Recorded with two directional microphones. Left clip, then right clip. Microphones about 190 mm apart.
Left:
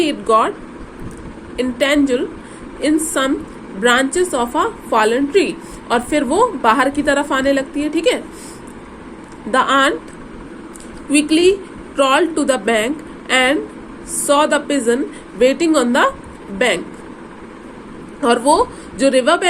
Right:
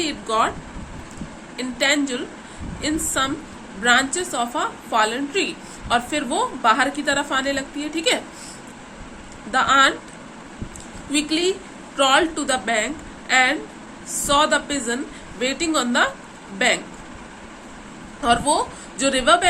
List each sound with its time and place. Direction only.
0.0 s a woman's voice: 20° left (ahead or behind)
1.5 s a woman's voice: 20° left (ahead or behind)
9.5 s a woman's voice: 25° left (ahead or behind)
11.1 s a woman's voice: 25° left (ahead or behind)
18.2 s a woman's voice: 20° left (ahead or behind)